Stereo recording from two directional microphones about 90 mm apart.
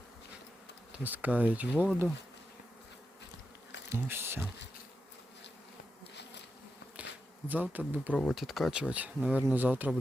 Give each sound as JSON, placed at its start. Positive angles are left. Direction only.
{"t": 0.9, "sound": "speech", "side_deg": -20}
{"t": 3.8, "sound": "bee", "side_deg": -25}
{"t": 7.0, "sound": "bee", "side_deg": -20}
{"t": 8.1, "sound": "speech", "side_deg": 15}
{"t": 8.4, "sound": "speech", "side_deg": 0}